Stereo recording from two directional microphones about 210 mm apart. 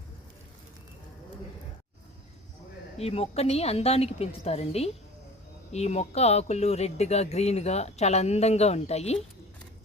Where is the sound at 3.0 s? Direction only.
30° left (ahead or behind).